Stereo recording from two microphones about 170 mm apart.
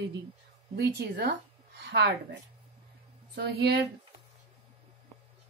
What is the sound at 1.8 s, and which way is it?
Speech, 80° right.